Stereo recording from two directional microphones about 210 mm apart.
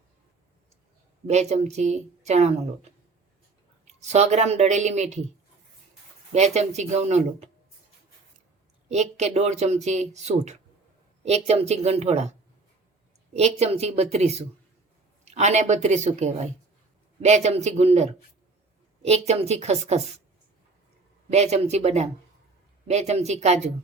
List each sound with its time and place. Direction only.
1.3 s speech: 30° right (ahead or behind)
4.0 s speech: 30° right (ahead or behind)
6.3 s speech: 30° right (ahead or behind)
8.9 s speech: 30° right (ahead or behind)
13.3 s speech: 30° right (ahead or behind)
21.2 s speech: 30° right (ahead or behind)